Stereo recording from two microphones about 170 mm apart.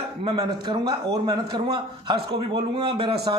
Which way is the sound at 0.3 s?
25° right (ahead or behind).